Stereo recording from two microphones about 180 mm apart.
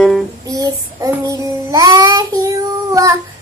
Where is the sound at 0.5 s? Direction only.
20° right (ahead or behind).